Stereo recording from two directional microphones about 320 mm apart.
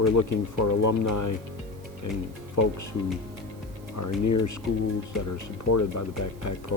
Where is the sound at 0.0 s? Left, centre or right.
Left.